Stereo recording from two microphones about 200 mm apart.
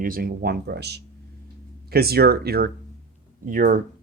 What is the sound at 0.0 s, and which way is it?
Speech, 45° right (ahead or behind).